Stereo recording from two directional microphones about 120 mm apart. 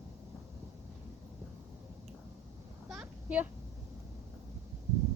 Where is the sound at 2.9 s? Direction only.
10° right (ahead or behind).